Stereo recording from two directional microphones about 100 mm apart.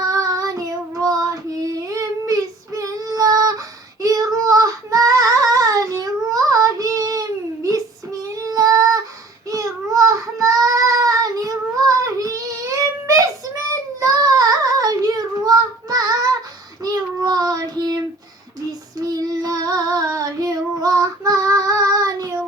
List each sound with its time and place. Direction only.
0.1 s child singing: 35° right (ahead or behind)
18.9 s child singing: 35° right (ahead or behind)